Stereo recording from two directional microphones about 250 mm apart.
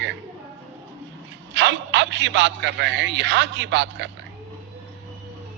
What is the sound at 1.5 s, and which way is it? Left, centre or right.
A man's voice, right.